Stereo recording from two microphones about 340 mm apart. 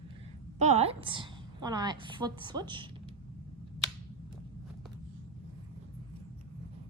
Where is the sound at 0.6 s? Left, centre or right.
Centre.